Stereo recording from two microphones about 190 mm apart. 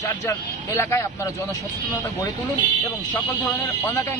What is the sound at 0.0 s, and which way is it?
Speech, 15° left (ahead or behind).